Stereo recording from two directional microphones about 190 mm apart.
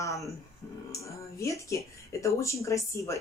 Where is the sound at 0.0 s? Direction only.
15° left (ahead or behind).